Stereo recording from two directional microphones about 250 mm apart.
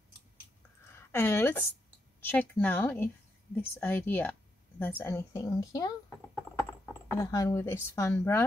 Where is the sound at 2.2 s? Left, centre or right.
Centre.